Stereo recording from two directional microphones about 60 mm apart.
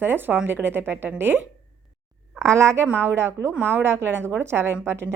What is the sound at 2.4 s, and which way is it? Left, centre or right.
Speech, right.